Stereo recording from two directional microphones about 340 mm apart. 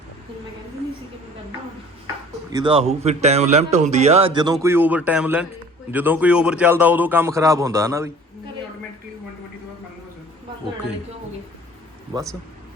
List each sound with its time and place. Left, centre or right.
2.5 s a man's voice: centre